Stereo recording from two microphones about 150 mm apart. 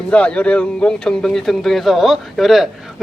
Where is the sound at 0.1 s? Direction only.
10° left (ahead or behind).